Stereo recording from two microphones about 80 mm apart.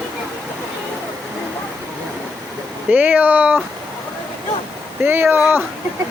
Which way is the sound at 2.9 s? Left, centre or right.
Right.